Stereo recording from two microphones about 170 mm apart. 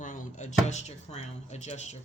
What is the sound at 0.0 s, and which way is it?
Speech, 50° left (ahead or behind).